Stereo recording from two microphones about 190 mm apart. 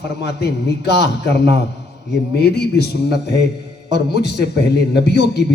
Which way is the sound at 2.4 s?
60° left (ahead or behind).